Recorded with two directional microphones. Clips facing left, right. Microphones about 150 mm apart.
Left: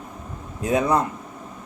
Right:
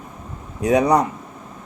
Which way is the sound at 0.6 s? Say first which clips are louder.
Right 4 dB; 70° right (ahead or behind).